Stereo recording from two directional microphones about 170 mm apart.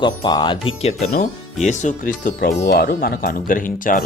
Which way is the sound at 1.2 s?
45° left (ahead or behind).